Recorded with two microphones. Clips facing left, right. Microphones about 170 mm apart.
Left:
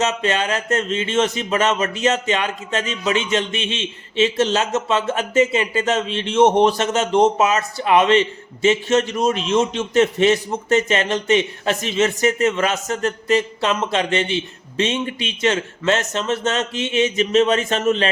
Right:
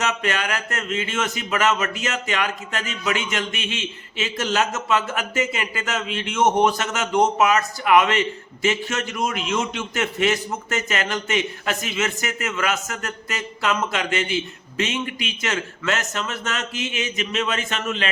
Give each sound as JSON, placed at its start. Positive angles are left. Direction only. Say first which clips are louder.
{"t": 0.0, "sound": "speech", "louder": "left 4 dB", "side_deg": 25}